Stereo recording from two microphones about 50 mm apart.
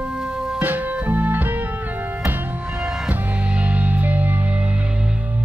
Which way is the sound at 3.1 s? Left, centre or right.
Right.